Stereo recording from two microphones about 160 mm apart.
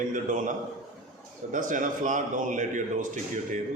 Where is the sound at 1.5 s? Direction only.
55° right (ahead or behind).